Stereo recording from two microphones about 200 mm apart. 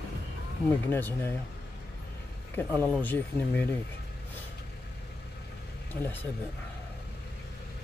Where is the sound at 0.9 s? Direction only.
10° left (ahead or behind).